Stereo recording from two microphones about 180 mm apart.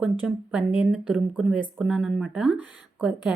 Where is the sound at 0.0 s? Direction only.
5° right (ahead or behind).